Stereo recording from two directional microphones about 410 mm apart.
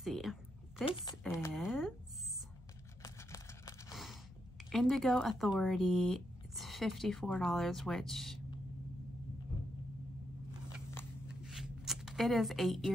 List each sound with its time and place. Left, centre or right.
0.0 s a sound: centre
0.8 s speech: centre
1.3 s speech: centre
3.0 s scissors: centre
4.6 s speech: centre
10.9 s a sound: centre